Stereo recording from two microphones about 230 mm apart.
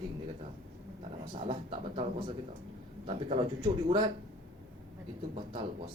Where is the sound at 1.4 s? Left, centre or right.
Right.